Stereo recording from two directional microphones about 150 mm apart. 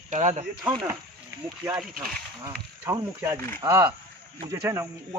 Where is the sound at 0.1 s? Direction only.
50° right (ahead or behind).